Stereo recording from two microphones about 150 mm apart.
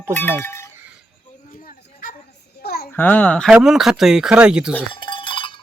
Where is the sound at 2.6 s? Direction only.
90° left.